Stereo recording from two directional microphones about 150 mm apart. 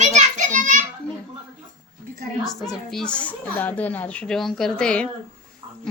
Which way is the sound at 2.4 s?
Centre (ahead or behind).